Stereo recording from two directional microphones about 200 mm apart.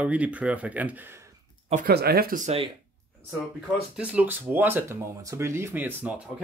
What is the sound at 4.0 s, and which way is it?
Speech, 5° right (ahead or behind).